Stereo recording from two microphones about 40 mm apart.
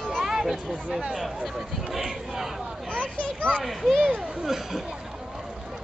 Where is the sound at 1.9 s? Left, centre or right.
Centre.